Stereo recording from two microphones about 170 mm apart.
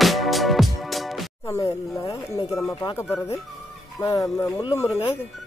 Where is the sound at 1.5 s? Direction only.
20° left (ahead or behind).